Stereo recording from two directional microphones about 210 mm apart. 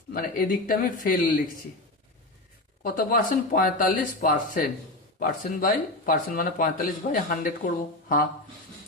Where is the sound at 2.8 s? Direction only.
40° left (ahead or behind).